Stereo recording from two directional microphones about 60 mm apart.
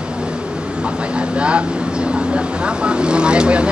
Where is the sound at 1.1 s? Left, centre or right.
Centre.